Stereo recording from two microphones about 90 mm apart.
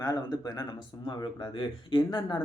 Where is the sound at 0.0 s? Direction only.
45° left (ahead or behind).